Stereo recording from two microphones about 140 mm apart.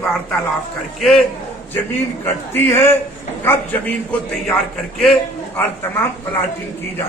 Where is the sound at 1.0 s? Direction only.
Centre (ahead or behind).